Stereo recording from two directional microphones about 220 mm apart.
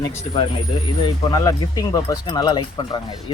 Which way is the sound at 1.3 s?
15° left (ahead or behind).